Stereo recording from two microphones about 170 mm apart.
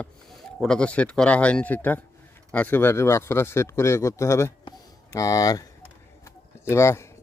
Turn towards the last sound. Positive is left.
turn(degrees=15)  # may be behind; listen again after turning